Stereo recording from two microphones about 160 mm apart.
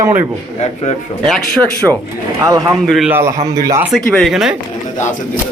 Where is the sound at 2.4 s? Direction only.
25° right (ahead or behind).